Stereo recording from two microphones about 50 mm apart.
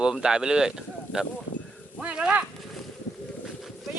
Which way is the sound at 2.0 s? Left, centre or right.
Right.